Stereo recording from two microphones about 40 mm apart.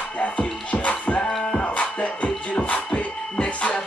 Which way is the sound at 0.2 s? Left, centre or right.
Left.